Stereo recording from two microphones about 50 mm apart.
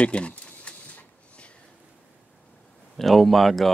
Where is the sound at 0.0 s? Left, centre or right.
Left.